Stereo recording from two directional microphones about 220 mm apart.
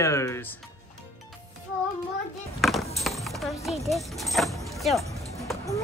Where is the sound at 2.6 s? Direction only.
Centre (ahead or behind).